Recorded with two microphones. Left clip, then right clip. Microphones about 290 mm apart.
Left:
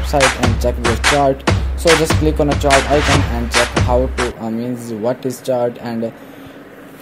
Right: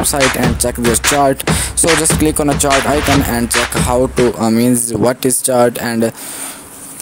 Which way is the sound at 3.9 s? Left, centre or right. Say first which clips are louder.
Right 4 dB; right.